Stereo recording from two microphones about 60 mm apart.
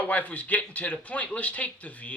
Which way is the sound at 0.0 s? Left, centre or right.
Left.